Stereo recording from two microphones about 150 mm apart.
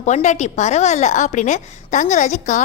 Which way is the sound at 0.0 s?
50° left (ahead or behind).